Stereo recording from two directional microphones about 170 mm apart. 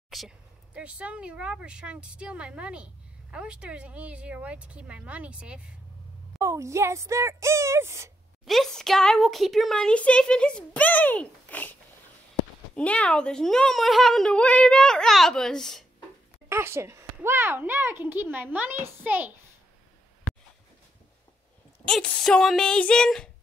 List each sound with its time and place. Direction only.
0.1 s speech: centre (ahead or behind)
6.4 s speech: 15° right (ahead or behind)
8.5 s speech: centre (ahead or behind)
16.4 s speech: 15° right (ahead or behind)
21.8 s speech: 5° left (ahead or behind)